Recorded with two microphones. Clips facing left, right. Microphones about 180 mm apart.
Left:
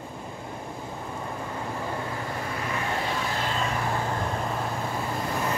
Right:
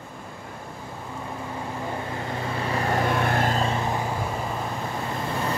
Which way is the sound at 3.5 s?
30° right (ahead or behind).